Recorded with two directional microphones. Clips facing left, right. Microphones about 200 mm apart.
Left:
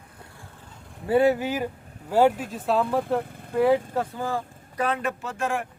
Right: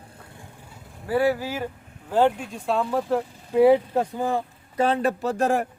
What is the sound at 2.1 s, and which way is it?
Speech, 10° left (ahead or behind).